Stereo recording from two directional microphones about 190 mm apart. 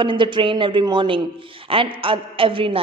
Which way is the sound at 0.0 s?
25° right (ahead or behind).